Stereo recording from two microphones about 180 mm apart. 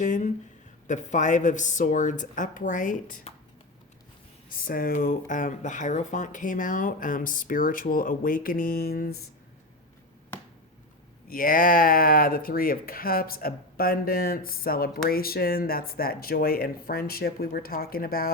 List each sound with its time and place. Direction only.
0.0 s speech: 45° left (ahead or behind)
4.4 s speech: 50° left (ahead or behind)
11.3 s speech: 50° left (ahead or behind)